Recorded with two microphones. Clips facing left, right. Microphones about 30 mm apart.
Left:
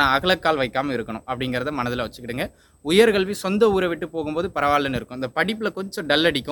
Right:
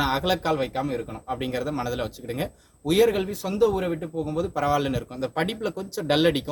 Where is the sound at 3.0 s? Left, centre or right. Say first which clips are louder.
Left 5 dB; left.